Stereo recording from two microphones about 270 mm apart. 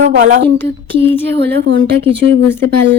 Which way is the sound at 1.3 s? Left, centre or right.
Right.